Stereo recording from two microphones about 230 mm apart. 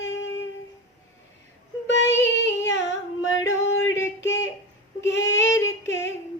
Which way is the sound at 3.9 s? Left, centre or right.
Centre.